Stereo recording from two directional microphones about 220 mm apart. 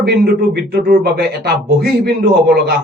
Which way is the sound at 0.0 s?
45° right (ahead or behind).